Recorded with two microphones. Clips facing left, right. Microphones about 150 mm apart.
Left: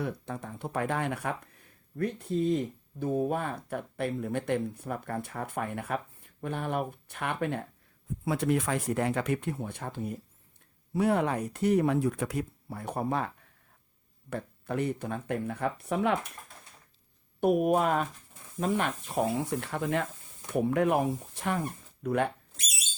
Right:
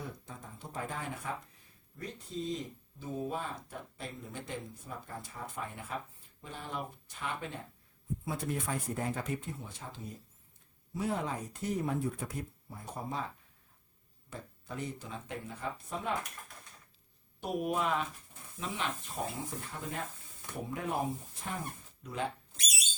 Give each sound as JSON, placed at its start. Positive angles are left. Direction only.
{"t": 0.0, "sound": "speech", "side_deg": 70}
{"t": 8.2, "sound": "speech", "side_deg": 75}
{"t": 17.6, "sound": "speech", "side_deg": 50}
{"t": 19.1, "sound": "speech", "side_deg": 80}